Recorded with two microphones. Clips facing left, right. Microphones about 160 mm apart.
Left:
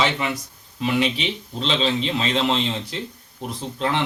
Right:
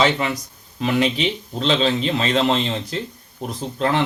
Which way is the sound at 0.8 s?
45° right (ahead or behind).